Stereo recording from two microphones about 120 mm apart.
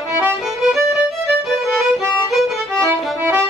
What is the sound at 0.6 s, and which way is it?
Music, centre (ahead or behind).